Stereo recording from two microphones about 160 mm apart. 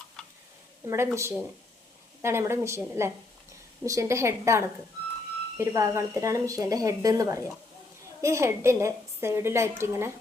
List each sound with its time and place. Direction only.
0.9 s a woman's voice: 15° right (ahead or behind)